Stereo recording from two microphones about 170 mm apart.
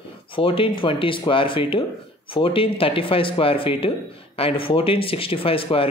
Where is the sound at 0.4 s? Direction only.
30° left (ahead or behind).